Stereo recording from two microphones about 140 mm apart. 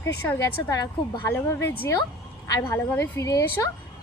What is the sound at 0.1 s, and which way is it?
A woman's voice, 20° left (ahead or behind).